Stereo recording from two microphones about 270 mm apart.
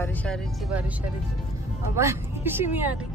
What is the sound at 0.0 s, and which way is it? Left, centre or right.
Speech, centre.